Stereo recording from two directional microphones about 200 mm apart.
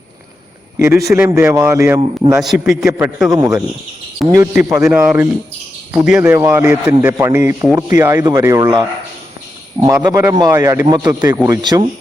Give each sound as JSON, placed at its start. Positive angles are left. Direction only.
{"t": 0.8, "sound": "speech", "side_deg": -15}
{"t": 2.4, "sound": "a man's voice", "side_deg": 0}
{"t": 3.2, "sound": "speech", "side_deg": -15}
{"t": 4.2, "sound": "a man's voice", "side_deg": 0}
{"t": 10.0, "sound": "speech", "side_deg": -15}